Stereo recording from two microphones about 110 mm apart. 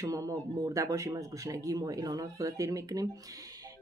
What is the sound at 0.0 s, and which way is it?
Speech, 30° right (ahead or behind).